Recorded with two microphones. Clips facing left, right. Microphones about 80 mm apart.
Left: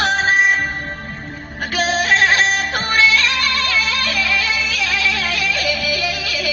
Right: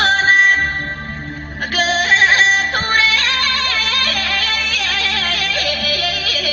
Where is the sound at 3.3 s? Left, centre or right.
Right.